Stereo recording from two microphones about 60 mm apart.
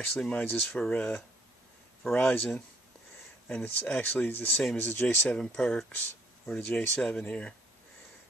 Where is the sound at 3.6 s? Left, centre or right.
Left.